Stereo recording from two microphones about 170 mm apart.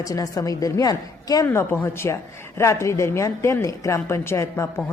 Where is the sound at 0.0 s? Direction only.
20° left (ahead or behind).